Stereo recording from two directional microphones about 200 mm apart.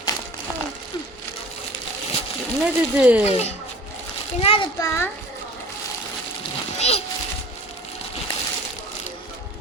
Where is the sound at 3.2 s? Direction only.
35° left (ahead or behind).